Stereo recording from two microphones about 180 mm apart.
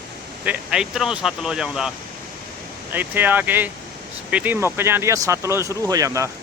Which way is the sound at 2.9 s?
10° right (ahead or behind).